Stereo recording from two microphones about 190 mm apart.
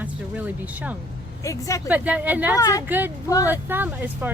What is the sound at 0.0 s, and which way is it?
Speech, 10° right (ahead or behind).